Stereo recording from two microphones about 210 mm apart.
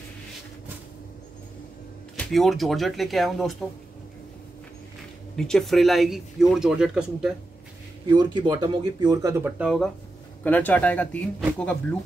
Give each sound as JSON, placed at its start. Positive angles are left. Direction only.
{"t": 2.1, "sound": "speech", "side_deg": 0}
{"t": 5.3, "sound": "speech", "side_deg": 5}
{"t": 8.1, "sound": "speech", "side_deg": -20}
{"t": 10.4, "sound": "speech", "side_deg": 10}